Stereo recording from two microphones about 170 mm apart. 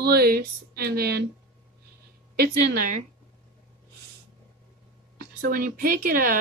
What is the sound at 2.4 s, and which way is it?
Speech, 60° right (ahead or behind).